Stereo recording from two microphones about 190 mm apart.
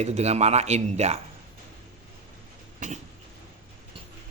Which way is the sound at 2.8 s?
40° right (ahead or behind).